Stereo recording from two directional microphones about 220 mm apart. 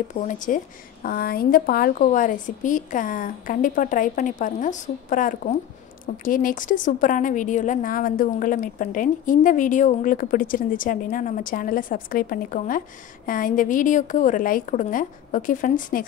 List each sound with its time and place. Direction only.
0.1 s a woman's voice: 35° left (ahead or behind)